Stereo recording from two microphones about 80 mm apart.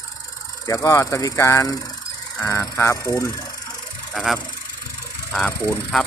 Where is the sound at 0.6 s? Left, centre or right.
Left.